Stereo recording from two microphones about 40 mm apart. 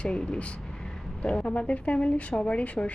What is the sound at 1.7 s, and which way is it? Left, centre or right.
A woman's voice, left.